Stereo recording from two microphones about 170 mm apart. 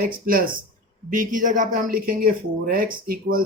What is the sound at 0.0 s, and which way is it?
Speech, 55° right (ahead or behind).